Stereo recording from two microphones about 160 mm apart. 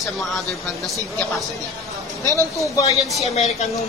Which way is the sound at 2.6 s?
20° left (ahead or behind).